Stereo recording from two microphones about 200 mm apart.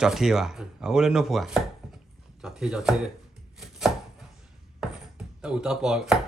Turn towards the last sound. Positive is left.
turn(degrees=-5)  # may be behind; listen again after turning